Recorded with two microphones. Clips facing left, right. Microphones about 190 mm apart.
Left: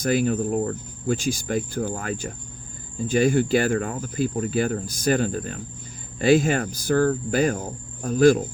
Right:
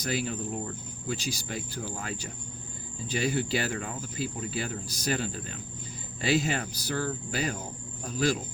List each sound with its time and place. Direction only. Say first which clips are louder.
0.0 s cricket: left 10 dB; 50° left (ahead or behind)